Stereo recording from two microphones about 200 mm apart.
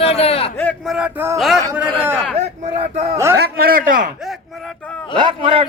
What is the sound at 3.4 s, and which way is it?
Speech, 50° right (ahead or behind).